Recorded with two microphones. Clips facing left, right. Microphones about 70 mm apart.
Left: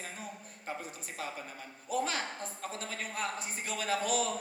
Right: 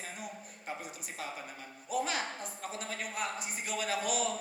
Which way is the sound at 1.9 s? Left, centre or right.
Left.